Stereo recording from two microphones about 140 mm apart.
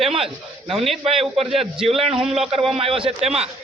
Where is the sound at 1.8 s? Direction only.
45° right (ahead or behind).